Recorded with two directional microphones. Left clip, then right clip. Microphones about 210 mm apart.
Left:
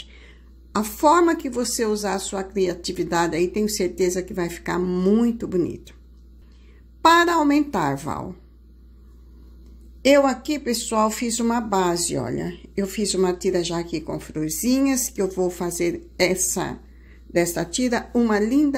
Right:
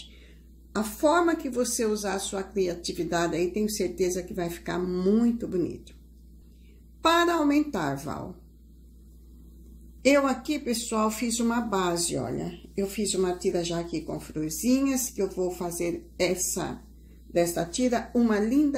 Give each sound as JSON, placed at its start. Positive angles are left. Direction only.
{"t": 0.7, "sound": "speech", "side_deg": 40}
{"t": 7.0, "sound": "a woman's voice", "side_deg": 40}
{"t": 10.0, "sound": "speech", "side_deg": 35}